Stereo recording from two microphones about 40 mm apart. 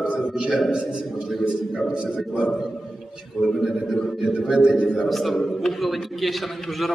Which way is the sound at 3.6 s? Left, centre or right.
Centre.